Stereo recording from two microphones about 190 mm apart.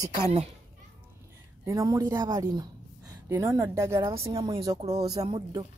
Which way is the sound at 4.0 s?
30° right (ahead or behind).